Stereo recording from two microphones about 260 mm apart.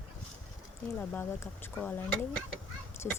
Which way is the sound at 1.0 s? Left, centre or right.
Centre.